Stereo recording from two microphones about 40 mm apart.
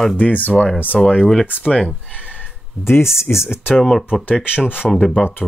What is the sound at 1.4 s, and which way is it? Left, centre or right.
Speech, left.